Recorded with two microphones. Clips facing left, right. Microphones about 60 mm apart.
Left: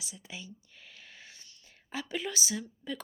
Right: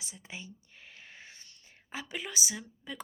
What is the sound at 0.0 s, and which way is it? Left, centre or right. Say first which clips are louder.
Speech: even; right.